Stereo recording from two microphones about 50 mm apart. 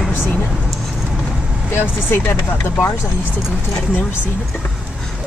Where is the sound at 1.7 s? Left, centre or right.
Left.